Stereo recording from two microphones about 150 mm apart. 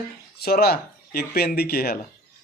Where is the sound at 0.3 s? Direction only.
90° left.